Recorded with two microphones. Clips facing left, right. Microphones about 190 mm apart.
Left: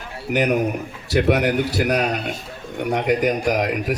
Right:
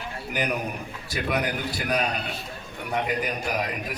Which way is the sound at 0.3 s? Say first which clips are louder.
Left 9 dB; 70° left (ahead or behind).